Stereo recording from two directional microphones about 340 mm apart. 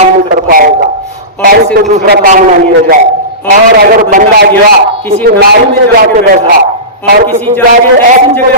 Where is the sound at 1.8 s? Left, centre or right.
Right.